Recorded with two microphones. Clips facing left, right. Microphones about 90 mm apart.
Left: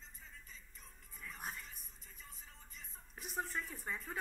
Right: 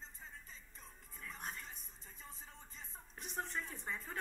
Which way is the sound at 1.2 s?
5° left (ahead or behind).